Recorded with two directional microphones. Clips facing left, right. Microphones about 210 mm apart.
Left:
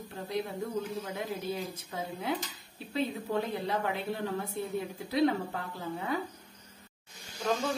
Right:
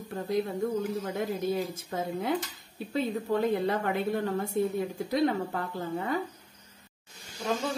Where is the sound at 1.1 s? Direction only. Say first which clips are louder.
Right 7 dB; 50° right (ahead or behind).